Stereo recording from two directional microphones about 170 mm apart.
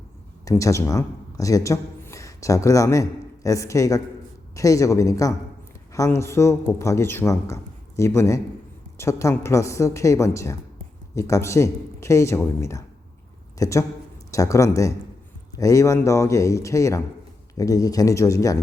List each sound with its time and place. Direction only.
0.4 s a man's voice: 20° left (ahead or behind)